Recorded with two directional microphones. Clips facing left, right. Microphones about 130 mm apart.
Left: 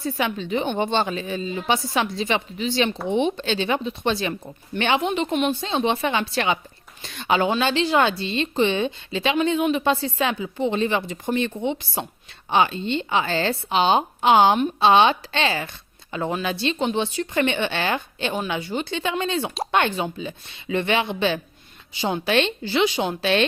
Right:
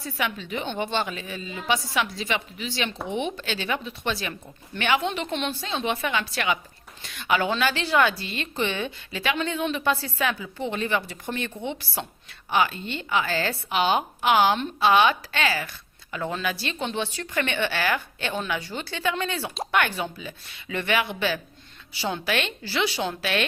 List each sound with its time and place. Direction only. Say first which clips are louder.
0.0 s a woman's voice: left 5 dB; 25° left (ahead or behind)